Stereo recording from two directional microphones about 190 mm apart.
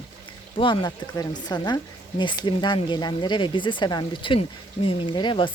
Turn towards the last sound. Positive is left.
turn(degrees=25)  # may be behind; listen again after turning